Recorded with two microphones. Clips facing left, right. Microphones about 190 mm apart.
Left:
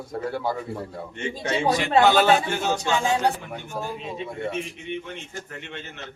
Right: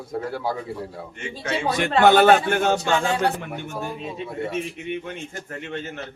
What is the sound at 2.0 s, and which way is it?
Speech, 55° right (ahead or behind).